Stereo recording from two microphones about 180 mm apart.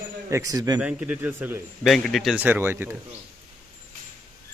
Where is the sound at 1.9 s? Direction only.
Centre (ahead or behind).